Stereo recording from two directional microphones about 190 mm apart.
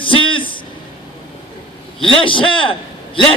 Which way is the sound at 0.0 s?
25° left (ahead or behind).